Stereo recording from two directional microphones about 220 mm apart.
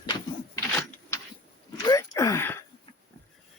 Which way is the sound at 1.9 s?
15° left (ahead or behind).